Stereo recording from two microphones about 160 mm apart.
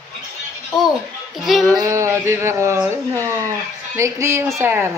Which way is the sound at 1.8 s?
20° right (ahead or behind).